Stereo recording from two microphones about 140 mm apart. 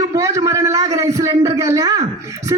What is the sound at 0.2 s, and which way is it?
A man's voice, 20° right (ahead or behind).